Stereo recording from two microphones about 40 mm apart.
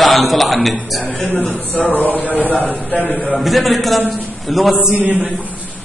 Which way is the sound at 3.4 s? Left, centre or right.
Centre.